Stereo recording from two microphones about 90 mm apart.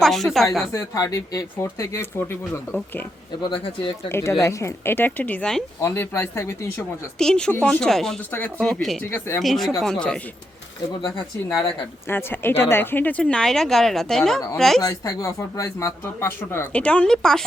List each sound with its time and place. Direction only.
0.0 s speech: 5° left (ahead or behind)
0.7 s speech: 35° left (ahead or behind); by 3.1 s 20° left (ahead or behind)
4.1 s speech: 30° left (ahead or behind); by 5.6 s 10° left (ahead or behind)
5.8 s speech: 25° left (ahead or behind)
7.2 s speech: 10° left (ahead or behind)
8.3 s speech: 15° left (ahead or behind)
8.6 s speech: centre (ahead or behind)
9.0 s speech: 20° left (ahead or behind)
9.4 s speech: centre (ahead or behind)
12.0 s speech: 25° left (ahead or behind); by 14.8 s 5° left (ahead or behind)
14.8 s speech: 45° left (ahead or behind)
16.7 s speech: 15° left (ahead or behind)